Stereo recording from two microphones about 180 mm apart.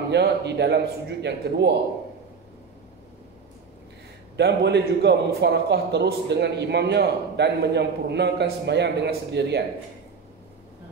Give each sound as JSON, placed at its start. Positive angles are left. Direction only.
{"t": 0.1, "sound": "a man's voice", "side_deg": -70}
{"t": 4.4, "sound": "a man's voice", "side_deg": -70}